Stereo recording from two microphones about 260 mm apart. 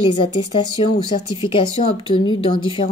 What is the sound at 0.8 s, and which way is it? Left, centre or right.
A woman's voice, centre.